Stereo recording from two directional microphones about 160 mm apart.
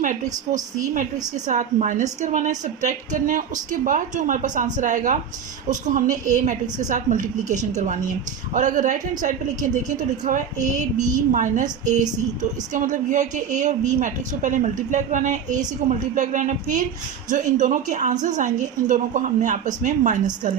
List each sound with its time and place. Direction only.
0.0 s a woman's voice: 55° right (ahead or behind)